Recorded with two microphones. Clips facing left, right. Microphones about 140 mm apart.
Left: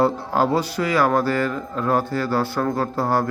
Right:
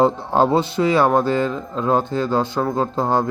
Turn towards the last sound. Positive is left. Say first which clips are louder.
# right 2 dB
turn(degrees=-20)  # may be behind; listen again after turning